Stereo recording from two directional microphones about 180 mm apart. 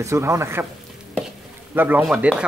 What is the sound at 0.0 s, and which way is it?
Speech, 15° right (ahead or behind).